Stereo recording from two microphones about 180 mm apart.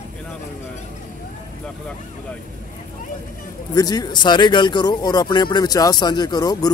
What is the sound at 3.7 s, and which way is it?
Speech, 20° left (ahead or behind).